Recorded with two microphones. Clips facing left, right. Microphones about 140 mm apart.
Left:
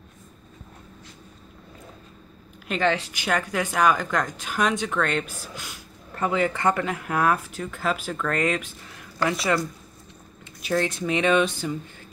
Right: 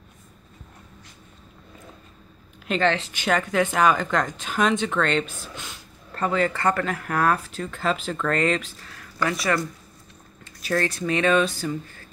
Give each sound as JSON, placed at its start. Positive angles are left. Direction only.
{"t": 2.7, "sound": "a woman's voice", "side_deg": 10}
{"t": 8.9, "sound": "a woman's voice", "side_deg": 20}